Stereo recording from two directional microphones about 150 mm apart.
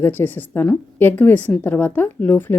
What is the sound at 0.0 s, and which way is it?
Speech, 15° left (ahead or behind).